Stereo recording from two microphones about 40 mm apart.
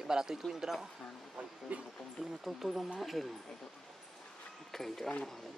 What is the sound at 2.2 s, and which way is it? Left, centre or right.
Speech, centre.